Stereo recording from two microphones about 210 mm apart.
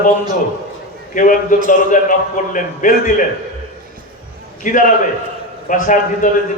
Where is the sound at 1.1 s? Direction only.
40° left (ahead or behind).